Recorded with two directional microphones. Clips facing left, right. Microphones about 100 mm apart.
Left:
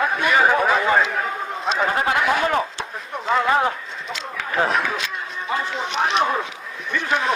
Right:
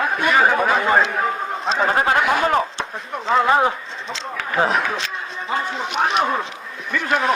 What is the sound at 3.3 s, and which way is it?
Speech, 20° right (ahead or behind).